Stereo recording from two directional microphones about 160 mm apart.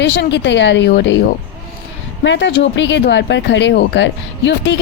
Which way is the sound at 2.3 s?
90° left.